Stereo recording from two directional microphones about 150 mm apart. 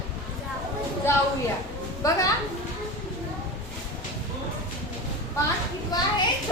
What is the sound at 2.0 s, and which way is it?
Speech, 20° left (ahead or behind).